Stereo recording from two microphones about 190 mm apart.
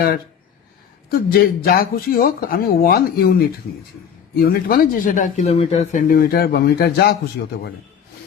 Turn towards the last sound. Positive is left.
turn(degrees=65)  # may be behind; listen again after turning